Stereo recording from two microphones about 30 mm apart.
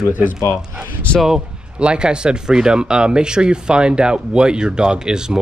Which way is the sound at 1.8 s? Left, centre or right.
Right.